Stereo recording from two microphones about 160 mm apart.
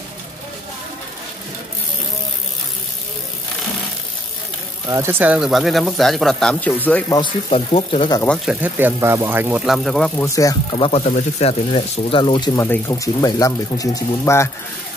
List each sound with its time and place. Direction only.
4.8 s speech: 15° right (ahead or behind); by 7.1 s 10° left (ahead or behind)
7.4 s speech: 35° left (ahead or behind)
8.5 s speech: 10° right (ahead or behind)
9.7 s speech: centre (ahead or behind)
10.1 s speech: 20° left (ahead or behind)
10.8 s speech: 40° left (ahead or behind)
12.5 s speech: 15° left (ahead or behind)